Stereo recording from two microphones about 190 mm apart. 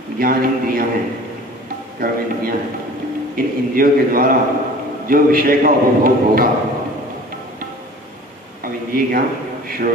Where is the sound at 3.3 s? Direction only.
50° right (ahead or behind).